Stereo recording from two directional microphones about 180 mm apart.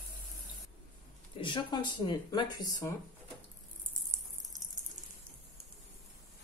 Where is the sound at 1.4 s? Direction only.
25° left (ahead or behind).